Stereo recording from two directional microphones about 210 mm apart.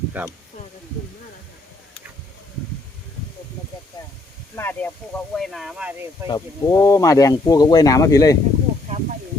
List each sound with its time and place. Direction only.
0.2 s speech: 10° right (ahead or behind)
4.5 s speech: 10° left (ahead or behind)
6.2 s speech: 15° left (ahead or behind)
8.9 s snake: 30° right (ahead or behind)